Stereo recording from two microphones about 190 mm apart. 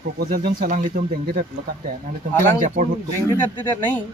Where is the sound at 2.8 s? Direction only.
45° right (ahead or behind).